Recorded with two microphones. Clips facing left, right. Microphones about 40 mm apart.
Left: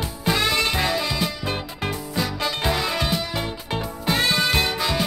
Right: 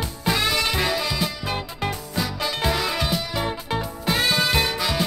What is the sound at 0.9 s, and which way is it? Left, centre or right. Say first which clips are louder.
Music: even; centre.